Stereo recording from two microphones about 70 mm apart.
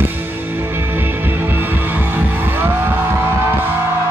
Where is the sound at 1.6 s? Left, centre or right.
Right.